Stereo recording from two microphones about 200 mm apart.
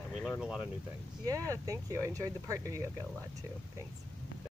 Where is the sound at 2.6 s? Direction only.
15° right (ahead or behind).